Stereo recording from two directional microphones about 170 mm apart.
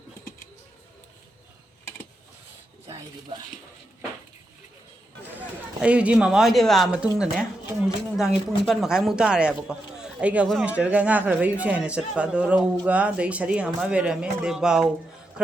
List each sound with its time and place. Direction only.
2.8 s speech: 20° right (ahead or behind)
5.8 s speech: 5° right (ahead or behind)